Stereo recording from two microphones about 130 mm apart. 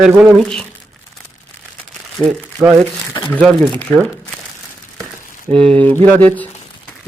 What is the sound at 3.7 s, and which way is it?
Speech, 10° left (ahead or behind).